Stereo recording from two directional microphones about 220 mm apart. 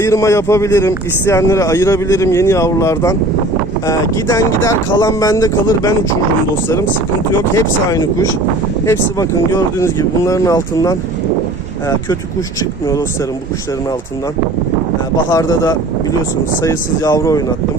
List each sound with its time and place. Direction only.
0.0 s speech: 15° left (ahead or behind)
7.5 s speech: 15° left (ahead or behind)
15.3 s speech: 15° left (ahead or behind)